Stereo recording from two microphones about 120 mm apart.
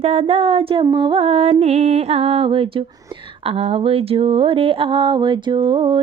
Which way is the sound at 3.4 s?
55° right (ahead or behind).